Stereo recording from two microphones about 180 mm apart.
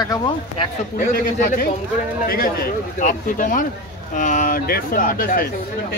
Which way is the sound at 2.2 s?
55° left (ahead or behind).